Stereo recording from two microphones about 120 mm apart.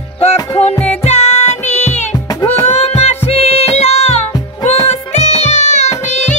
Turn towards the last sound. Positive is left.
turn(degrees=70)  # may be behind; listen again after turning